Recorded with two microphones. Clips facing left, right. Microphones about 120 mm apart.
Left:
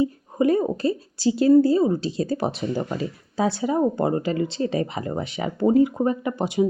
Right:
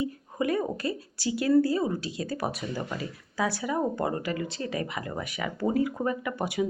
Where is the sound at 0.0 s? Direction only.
30° left (ahead or behind).